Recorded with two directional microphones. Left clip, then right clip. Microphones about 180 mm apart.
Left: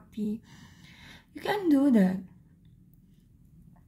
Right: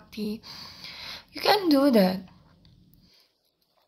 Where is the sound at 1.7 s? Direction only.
20° left (ahead or behind).